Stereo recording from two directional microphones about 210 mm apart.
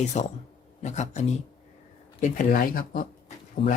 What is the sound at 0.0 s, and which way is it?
Speech, 35° left (ahead or behind).